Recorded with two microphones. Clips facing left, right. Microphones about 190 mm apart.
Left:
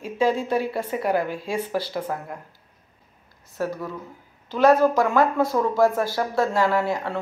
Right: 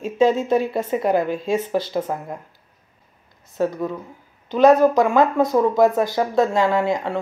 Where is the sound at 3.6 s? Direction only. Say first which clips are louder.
Right 6 dB; 20° right (ahead or behind).